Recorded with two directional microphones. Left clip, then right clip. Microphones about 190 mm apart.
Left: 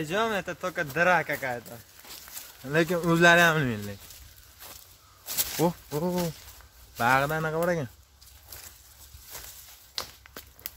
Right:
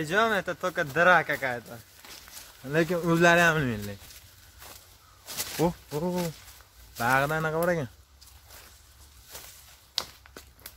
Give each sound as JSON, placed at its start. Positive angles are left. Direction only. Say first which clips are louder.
{"t": 0.0, "sound": "speech", "louder": "right 3 dB", "side_deg": -10}
{"t": 2.6, "sound": "speech", "louder": "left 1 dB", "side_deg": 10}
{"t": 5.2, "sound": "a sound", "louder": "left 1 dB", "side_deg": 35}
{"t": 5.7, "sound": "speech", "louder": "left 1 dB", "side_deg": 20}
{"t": 7.2, "sound": "speech", "louder": "even", "side_deg": 5}
{"t": 10.0, "sound": "walk", "louder": "right 3 dB", "side_deg": -10}